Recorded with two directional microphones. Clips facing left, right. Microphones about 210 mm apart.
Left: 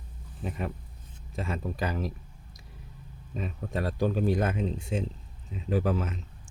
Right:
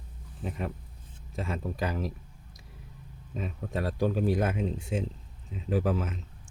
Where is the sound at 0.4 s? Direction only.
Centre (ahead or behind).